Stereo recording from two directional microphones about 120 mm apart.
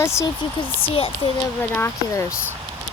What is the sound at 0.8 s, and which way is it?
Speech, 50° left (ahead or behind).